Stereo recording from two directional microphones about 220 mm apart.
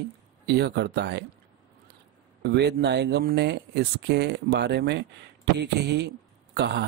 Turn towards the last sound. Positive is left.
turn(degrees=-50)  # may be behind; listen again after turning